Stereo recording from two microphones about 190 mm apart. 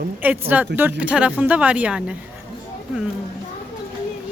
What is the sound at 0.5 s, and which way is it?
Speech, 10° right (ahead or behind).